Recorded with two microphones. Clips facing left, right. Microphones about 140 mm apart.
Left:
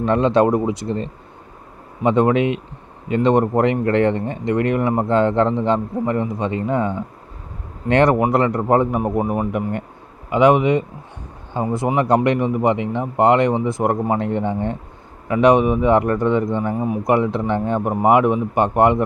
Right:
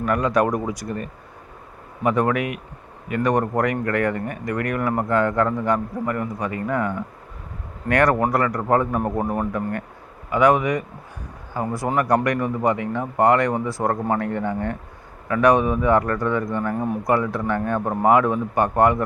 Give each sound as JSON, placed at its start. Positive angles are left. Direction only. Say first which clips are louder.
{"t": 0.0, "sound": "speech", "louder": "left 5 dB", "side_deg": 25}
{"t": 16.7, "sound": "speech", "louder": "left 2 dB", "side_deg": 5}
{"t": 17.0, "sound": "speech", "louder": "left 5 dB", "side_deg": 20}